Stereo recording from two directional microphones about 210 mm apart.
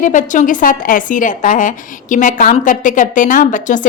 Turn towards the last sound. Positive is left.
turn(degrees=40)  # may be behind; listen again after turning